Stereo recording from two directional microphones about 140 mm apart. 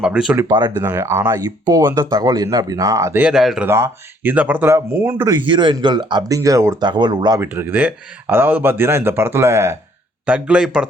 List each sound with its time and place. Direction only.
0.0 s speech: 5° right (ahead or behind)
0.4 s speech: 25° right (ahead or behind)
0.8 s speech: 15° right (ahead or behind)
1.5 s speech: 30° right (ahead or behind)
3.3 s speech: 5° right (ahead or behind)
3.7 s speech: 20° right (ahead or behind)
5.3 s speech: 35° right (ahead or behind)
7.4 s speech: 15° right (ahead or behind)
10.2 s speech: 10° right (ahead or behind)